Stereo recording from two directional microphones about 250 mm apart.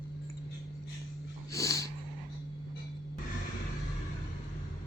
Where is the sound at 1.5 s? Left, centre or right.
Centre.